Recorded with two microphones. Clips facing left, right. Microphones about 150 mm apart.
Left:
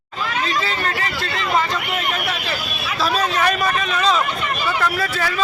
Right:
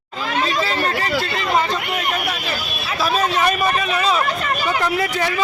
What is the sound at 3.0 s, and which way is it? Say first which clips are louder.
Speech: right 1 dB; 10° right (ahead or behind).